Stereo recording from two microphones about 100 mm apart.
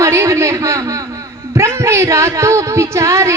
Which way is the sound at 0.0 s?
30° right (ahead or behind).